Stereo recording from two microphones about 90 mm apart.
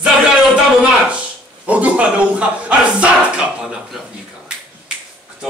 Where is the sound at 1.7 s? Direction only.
15° right (ahead or behind).